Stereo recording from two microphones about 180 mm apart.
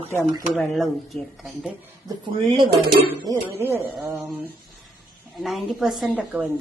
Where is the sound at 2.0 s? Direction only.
25° right (ahead or behind); by 3.8 s 10° right (ahead or behind).